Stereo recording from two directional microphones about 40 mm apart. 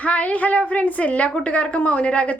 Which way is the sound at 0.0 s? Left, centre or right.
Left.